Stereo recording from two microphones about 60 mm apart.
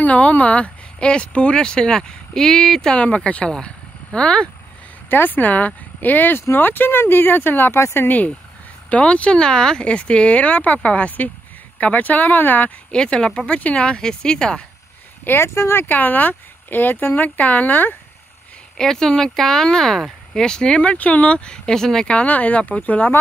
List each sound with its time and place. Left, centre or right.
0.0 s speech: left
5.1 s speech: left
8.9 s speech: left
12.9 s speech: centre
15.2 s speech: left
15.9 s speech: left
18.8 s speech: centre
22.1 s speech: left